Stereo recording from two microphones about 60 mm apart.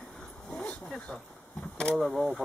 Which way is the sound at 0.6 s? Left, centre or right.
Centre.